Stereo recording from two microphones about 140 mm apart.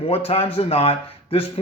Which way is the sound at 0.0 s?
45° left (ahead or behind).